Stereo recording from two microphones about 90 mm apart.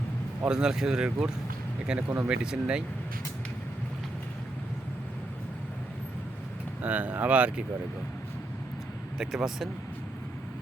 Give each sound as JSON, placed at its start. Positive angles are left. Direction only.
{"t": 0.4, "sound": "speech", "side_deg": -10}
{"t": 2.0, "sound": "speech", "side_deg": -20}
{"t": 2.3, "sound": "speech", "side_deg": -10}
{"t": 6.8, "sound": "speech", "side_deg": -15}
{"t": 9.1, "sound": "speech", "side_deg": -5}